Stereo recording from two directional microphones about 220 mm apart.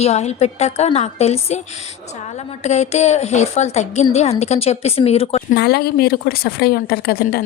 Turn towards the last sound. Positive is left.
turn(degrees=45)  # may be behind; listen again after turning